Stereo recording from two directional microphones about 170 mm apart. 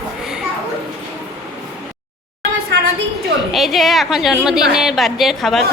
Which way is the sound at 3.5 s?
Centre (ahead or behind).